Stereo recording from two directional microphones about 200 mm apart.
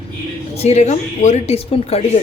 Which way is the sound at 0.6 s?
35° left (ahead or behind).